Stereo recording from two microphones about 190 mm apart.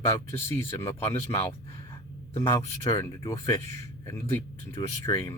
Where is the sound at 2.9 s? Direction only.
20° left (ahead or behind).